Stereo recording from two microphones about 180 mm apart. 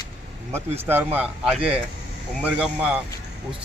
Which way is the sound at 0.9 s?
10° right (ahead or behind).